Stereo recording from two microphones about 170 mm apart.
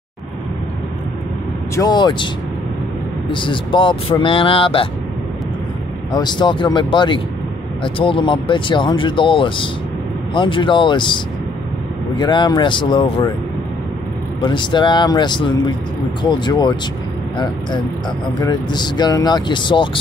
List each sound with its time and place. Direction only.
1.8 s speech: 25° left (ahead or behind)
3.3 s speech: 30° left (ahead or behind)
6.1 s speech: 25° left (ahead or behind)
12.2 s speech: 25° left (ahead or behind)
14.4 s speech: 25° left (ahead or behind)